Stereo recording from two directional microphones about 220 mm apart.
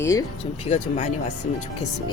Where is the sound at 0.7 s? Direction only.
30° left (ahead or behind).